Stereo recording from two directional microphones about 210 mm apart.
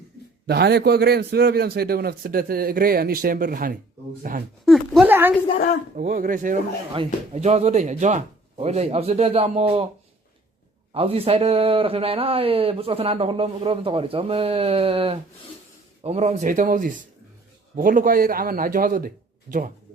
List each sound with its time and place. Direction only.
0.4 s a man's voice: 50° right (ahead or behind)
4.6 s a sound: centre (ahead or behind)
6.0 s speech: 40° right (ahead or behind)
6.9 s speech: 30° right (ahead or behind)
10.9 s a man's voice: 30° right (ahead or behind)